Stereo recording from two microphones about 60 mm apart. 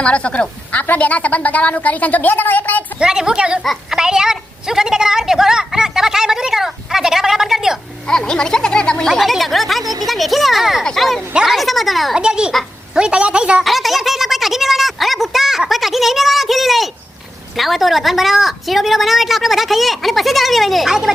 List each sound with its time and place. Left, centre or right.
0.0 s a woman's voice: centre
3.0 s a woman's voice: centre
3.9 s a sound: centre
8.0 s speech: centre
9.0 s a woman's voice: centre
9.8 s a woman's voice: right
10.1 s a woman's voice: centre
12.1 s a woman's voice: centre
13.7 s a sound: centre
17.6 s a woman's voice: centre